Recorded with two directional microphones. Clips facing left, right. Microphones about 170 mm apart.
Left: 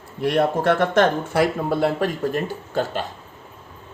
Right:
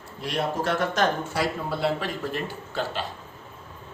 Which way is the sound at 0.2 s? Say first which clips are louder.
Left 8 dB; 55° left (ahead or behind).